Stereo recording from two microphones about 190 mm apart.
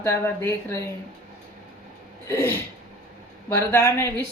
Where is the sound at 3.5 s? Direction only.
15° left (ahead or behind).